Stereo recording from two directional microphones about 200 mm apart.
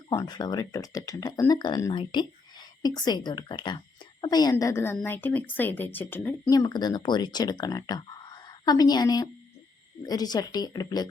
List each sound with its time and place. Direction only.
0.1 s a woman's voice: 20° left (ahead or behind)